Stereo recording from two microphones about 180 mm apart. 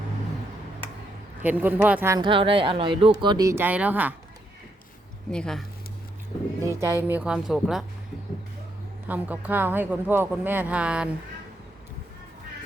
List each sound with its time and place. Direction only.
1.4 s speech: 10° right (ahead or behind)
2.1 s speech: 30° right (ahead or behind); by 4.1 s 10° right (ahead or behind)
5.3 s speech: 5° left (ahead or behind)
6.6 s speech: 15° right (ahead or behind)
9.0 s speech: 10° right (ahead or behind)